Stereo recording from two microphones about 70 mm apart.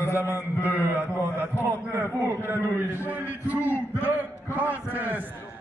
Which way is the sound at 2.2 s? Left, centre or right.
Right.